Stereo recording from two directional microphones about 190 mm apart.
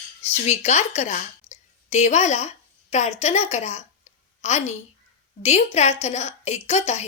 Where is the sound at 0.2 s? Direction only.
35° left (ahead or behind).